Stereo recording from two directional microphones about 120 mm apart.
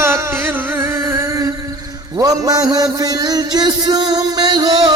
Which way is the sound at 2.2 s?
30° right (ahead or behind).